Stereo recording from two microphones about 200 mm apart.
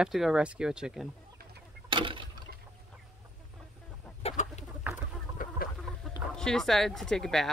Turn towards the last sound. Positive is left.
turn(degrees=0)  # may be behind; listen again after turning